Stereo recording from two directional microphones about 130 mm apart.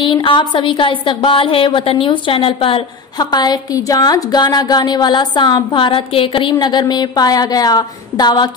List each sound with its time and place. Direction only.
0.0 s speech: 40° left (ahead or behind)
3.2 s speech: 30° left (ahead or behind)